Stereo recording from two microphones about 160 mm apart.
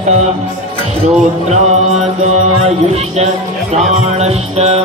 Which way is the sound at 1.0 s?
45° right (ahead or behind).